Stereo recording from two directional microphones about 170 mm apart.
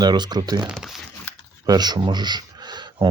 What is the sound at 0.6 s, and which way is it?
Speech, 5° right (ahead or behind).